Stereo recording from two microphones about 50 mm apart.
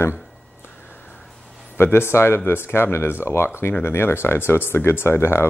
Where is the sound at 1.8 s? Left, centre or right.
Left.